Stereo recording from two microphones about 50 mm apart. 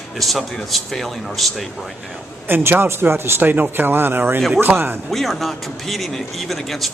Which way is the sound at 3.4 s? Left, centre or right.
Right.